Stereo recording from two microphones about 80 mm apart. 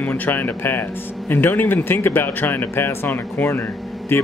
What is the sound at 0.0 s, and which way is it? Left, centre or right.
Speech, left.